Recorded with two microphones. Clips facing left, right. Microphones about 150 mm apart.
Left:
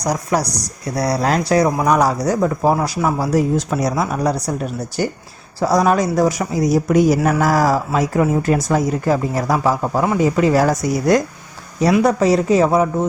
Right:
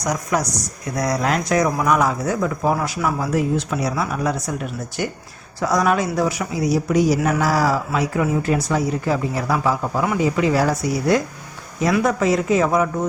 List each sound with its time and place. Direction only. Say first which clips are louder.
0.0 s speech: left 3 dB; 35° left (ahead or behind)